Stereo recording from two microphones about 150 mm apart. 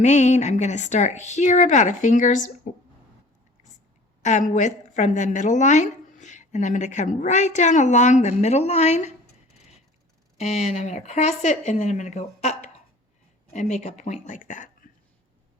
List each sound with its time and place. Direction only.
0.0 s speech: 50° left (ahead or behind)
4.2 s a woman's voice: 55° left (ahead or behind)